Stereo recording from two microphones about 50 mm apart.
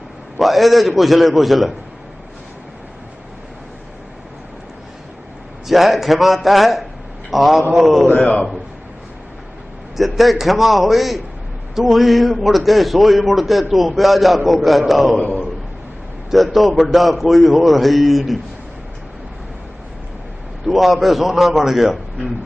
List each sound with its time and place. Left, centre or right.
0.3 s a man's voice: centre
5.6 s a man's voice: centre
10.0 s a man's voice: centre
15.2 s a man's voice: left
16.3 s a man's voice: centre
20.7 s a man's voice: centre